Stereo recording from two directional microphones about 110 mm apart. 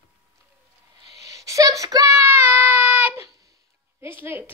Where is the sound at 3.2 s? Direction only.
30° right (ahead or behind).